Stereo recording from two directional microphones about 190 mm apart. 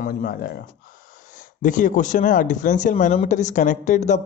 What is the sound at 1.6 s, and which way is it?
A man's voice, 45° left (ahead or behind).